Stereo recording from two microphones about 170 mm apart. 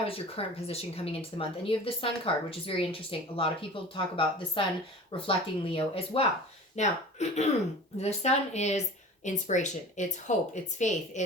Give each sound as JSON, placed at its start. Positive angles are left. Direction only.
{"t": 0.1, "sound": "speech", "side_deg": 35}